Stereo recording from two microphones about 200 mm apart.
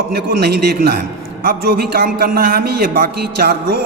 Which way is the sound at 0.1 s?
50° right (ahead or behind).